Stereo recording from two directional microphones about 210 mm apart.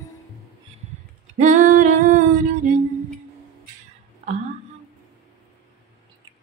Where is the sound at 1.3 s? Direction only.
35° right (ahead or behind).